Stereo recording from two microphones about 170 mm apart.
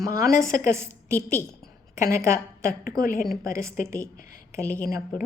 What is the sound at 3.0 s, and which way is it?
Speech, 55° left (ahead or behind).